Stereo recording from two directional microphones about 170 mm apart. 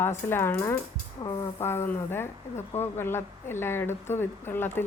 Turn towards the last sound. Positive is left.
turn(degrees=10)  # may be behind; listen again after turning